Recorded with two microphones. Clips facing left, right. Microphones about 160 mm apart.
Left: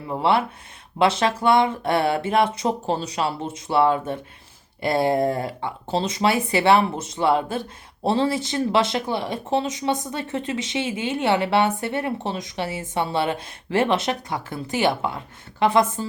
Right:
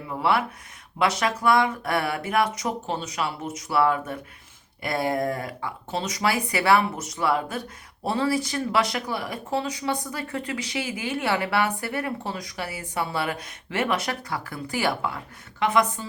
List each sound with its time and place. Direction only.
0.1 s speech: 30° left (ahead or behind)